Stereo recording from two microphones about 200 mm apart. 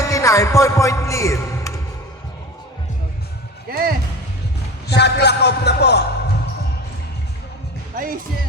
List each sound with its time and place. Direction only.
0.1 s a man's voice: 15° left (ahead or behind)
3.7 s speech: 50° right (ahead or behind)
4.9 s a man's voice: 55° left (ahead or behind)
7.9 s speech: 45° right (ahead or behind)